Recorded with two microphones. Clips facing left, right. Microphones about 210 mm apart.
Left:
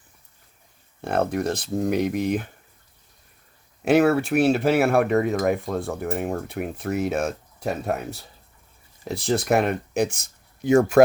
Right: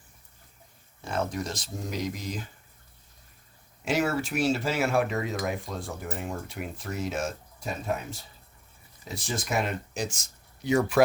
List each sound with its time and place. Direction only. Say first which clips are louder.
1.0 s speech: left 8 dB; 60° left (ahead or behind)
3.8 s speech: left 9 dB; 60° left (ahead or behind)